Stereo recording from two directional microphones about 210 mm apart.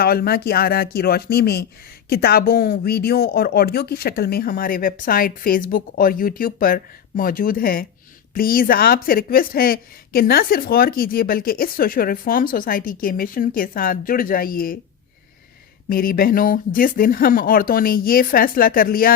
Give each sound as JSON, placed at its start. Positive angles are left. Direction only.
{"t": 0.0, "sound": "a woman's voice", "side_deg": 45}
{"t": 15.9, "sound": "a woman's voice", "side_deg": 45}